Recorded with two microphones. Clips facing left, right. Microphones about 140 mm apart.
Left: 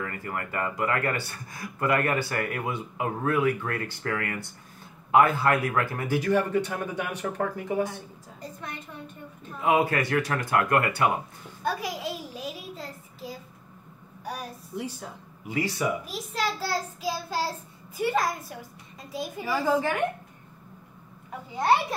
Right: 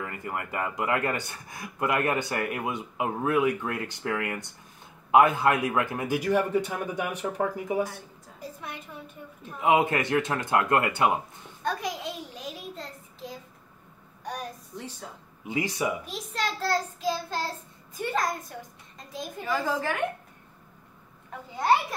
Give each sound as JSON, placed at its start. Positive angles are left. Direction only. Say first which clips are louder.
{"t": 0.0, "sound": "speech", "louder": "left 1 dB", "side_deg": -15}
{"t": 9.6, "sound": "speech", "louder": "right 1 dB", "side_deg": -20}
{"t": 11.6, "sound": "a sound", "louder": "left 1 dB", "side_deg": 5}
{"t": 14.2, "sound": "a woman's voice", "louder": "even", "side_deg": 5}
{"t": 15.4, "sound": "speech", "louder": "left 1 dB", "side_deg": -20}
{"t": 16.1, "sound": "a child's voice", "louder": "left 2 dB", "side_deg": 5}